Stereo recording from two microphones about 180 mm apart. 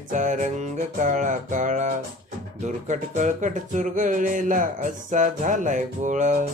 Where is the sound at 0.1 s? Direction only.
45° right (ahead or behind).